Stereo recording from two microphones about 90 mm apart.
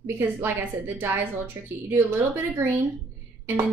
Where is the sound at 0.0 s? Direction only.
25° right (ahead or behind).